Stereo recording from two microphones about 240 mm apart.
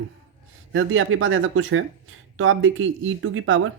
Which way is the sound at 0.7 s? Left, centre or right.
Right.